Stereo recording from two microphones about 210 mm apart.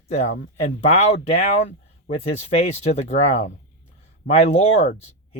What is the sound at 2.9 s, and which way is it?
Speech, 30° left (ahead or behind).